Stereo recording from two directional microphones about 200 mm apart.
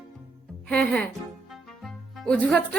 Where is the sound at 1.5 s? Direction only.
Centre (ahead or behind).